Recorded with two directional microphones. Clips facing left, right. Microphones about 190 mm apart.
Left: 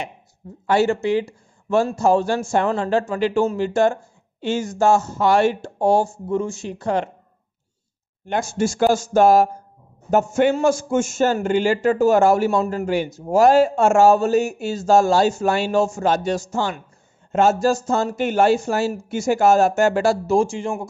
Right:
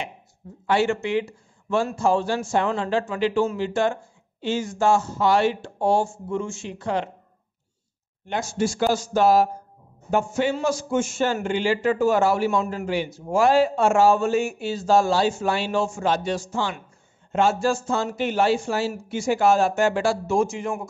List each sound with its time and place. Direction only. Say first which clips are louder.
0.7 s a man's voice: left 4 dB; 40° left (ahead or behind)
8.3 s a man's voice: left 3 dB; 50° left (ahead or behind); by 20.9 s 30° left (ahead or behind)